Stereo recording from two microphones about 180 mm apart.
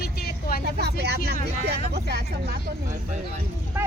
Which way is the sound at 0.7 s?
65° right (ahead or behind).